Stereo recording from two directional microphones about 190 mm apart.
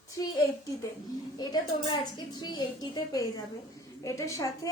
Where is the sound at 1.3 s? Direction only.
20° left (ahead or behind).